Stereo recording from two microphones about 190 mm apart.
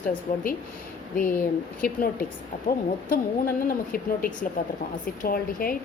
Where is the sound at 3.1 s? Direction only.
50° left (ahead or behind).